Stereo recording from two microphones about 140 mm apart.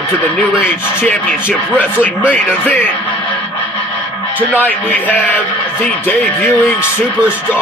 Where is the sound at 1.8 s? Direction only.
10° left (ahead or behind).